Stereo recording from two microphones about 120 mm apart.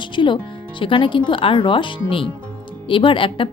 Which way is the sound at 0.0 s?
40° left (ahead or behind).